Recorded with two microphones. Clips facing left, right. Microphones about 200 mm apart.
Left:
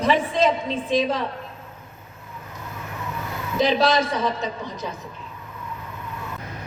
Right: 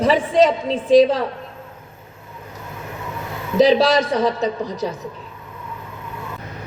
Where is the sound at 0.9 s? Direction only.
35° right (ahead or behind).